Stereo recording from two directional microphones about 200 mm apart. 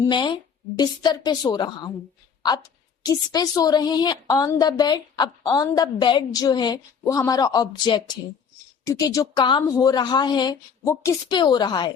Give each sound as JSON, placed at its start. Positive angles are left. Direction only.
{"t": 0.0, "sound": "a woman's voice", "side_deg": 20}
{"t": 3.0, "sound": "a woman's voice", "side_deg": 20}